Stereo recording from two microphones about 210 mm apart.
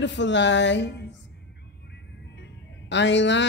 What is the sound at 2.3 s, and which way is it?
Music, 55° left (ahead or behind).